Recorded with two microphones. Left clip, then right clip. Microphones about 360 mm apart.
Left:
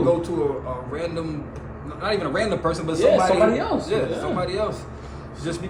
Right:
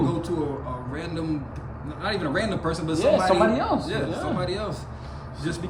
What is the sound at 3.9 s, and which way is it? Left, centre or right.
Speech, centre.